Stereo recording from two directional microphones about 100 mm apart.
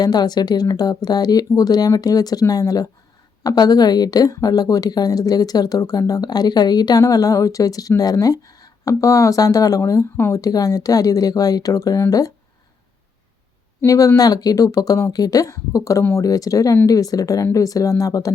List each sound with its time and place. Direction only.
0.0 s a woman's voice: 45° left (ahead or behind)
13.8 s a woman's voice: 35° left (ahead or behind)